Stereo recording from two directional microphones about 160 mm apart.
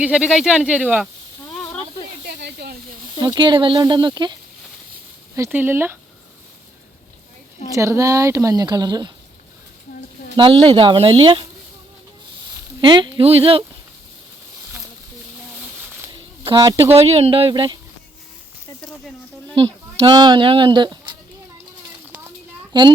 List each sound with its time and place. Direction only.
0.0 s speech: 5° right (ahead or behind)
2.2 s snake: 80° right
3.2 s speech: 25° right (ahead or behind)
5.4 s speech: 10° right (ahead or behind)
7.7 s speech: 20° right (ahead or behind)
10.3 s speech: 30° right (ahead or behind)
12.8 s speech: 30° right (ahead or behind)
16.4 s speech: 30° right (ahead or behind)
16.9 s speech: 40° right (ahead or behind)
19.5 s speech: 35° right (ahead or behind)
22.7 s speech: 30° right (ahead or behind)